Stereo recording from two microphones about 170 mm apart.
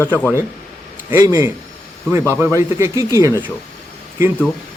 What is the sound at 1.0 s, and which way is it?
Speech, 20° right (ahead or behind).